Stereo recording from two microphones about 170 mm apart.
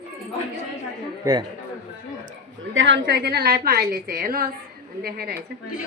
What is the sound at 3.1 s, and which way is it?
A woman's voice, 70° right (ahead or behind).